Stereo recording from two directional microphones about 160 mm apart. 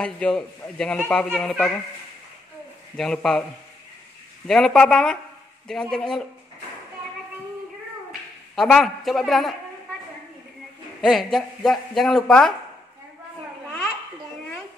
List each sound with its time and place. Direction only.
0.0 s speech: 5° left (ahead or behind)
3.0 s speech: 5° left (ahead or behind)
4.5 s speech: centre (ahead or behind)
8.5 s speech: 5° left (ahead or behind)
11.0 s speech: centre (ahead or behind)